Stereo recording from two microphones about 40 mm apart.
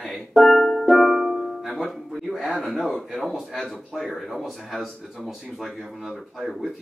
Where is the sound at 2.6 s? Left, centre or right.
Centre.